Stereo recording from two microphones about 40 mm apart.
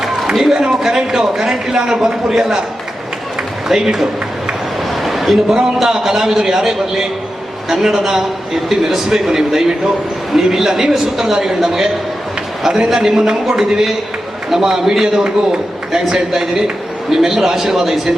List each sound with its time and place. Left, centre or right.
0.0 s a sound: centre
0.7 s a man's voice: centre
3.8 s a man's voice: centre
5.0 s a sound: centre
5.8 s a man's voice: centre
12.9 s a man's voice: centre